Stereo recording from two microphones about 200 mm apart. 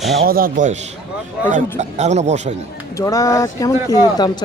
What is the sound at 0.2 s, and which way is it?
Speech, 45° right (ahead or behind).